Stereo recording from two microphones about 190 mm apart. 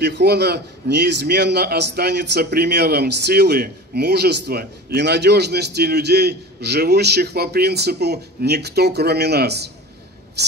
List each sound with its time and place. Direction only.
0.0 s a man's voice: 60° right (ahead or behind)